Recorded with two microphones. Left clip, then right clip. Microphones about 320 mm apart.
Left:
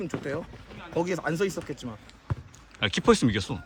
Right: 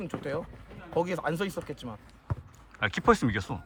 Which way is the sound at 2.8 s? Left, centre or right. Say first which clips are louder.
Left 2 dB; centre.